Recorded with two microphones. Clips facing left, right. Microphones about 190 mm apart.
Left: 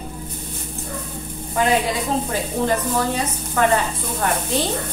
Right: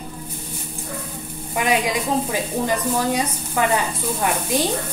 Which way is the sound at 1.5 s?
15° right (ahead or behind).